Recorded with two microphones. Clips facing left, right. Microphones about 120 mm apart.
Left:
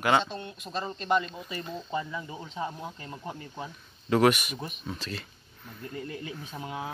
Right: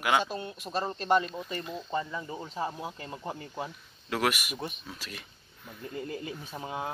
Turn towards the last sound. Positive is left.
turn(degrees=-10)  # may be behind; listen again after turning